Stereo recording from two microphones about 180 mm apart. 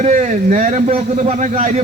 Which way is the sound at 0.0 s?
45° right (ahead or behind).